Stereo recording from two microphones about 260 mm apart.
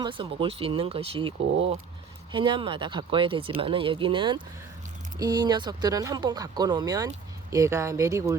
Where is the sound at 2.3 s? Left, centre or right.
Centre.